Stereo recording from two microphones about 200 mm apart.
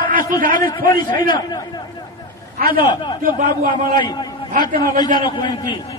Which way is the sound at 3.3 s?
40° right (ahead or behind).